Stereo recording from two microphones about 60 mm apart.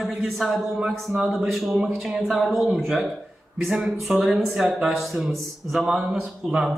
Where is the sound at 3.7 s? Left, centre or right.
Centre.